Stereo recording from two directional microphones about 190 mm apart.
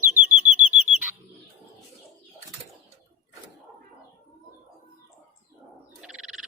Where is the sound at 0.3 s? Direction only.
40° right (ahead or behind).